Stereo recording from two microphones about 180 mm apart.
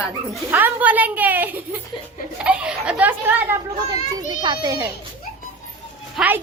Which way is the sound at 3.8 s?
25° right (ahead or behind).